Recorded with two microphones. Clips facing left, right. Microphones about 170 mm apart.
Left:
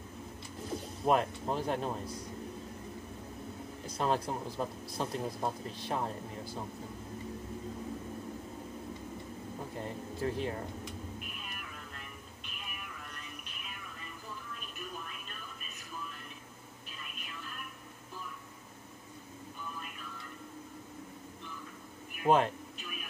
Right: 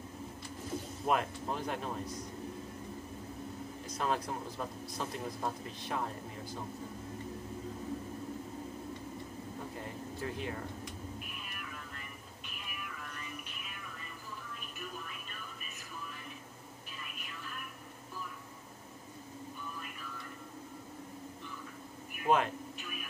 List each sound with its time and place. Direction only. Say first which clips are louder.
1.0 s speech: left 4 dB; 35° left (ahead or behind)
3.8 s speech: left 3 dB; 30° left (ahead or behind)
10.2 s speech: left 5 dB; 35° left (ahead or behind)
22.2 s speech: left 3 dB; 35° left (ahead or behind)